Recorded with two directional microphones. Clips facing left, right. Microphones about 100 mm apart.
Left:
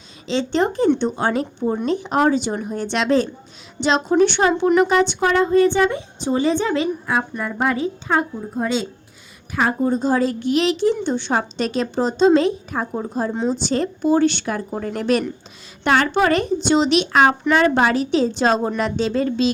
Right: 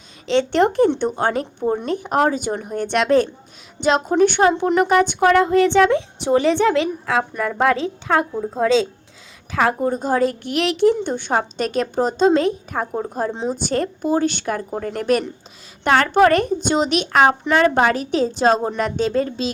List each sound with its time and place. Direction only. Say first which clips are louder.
0.3 s speech: right 3 dB; 60° right (ahead or behind)
0.9 s a woman's voice: even; 50° right (ahead or behind); by 9.7 s 85° right
9.8 s speech: even; 50° right (ahead or behind)
11.0 s a woman's voice: even; 50° right (ahead or behind)
17.4 s a woman's voice: even; 35° right (ahead or behind)